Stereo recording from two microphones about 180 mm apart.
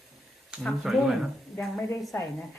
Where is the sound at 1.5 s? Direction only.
10° left (ahead or behind).